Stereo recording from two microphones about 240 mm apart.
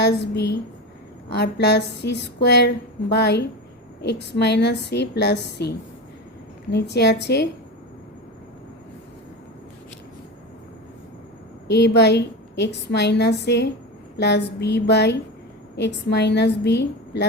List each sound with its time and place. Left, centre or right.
0.0 s a woman's voice: left
11.7 s a woman's voice: left